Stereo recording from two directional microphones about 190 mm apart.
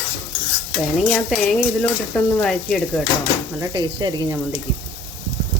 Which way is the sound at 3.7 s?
20° right (ahead or behind).